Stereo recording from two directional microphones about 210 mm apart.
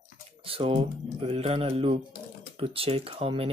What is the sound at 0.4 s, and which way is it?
Speech, 25° right (ahead or behind).